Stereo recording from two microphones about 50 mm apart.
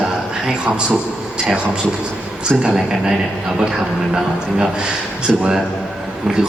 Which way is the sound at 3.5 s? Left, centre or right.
Centre.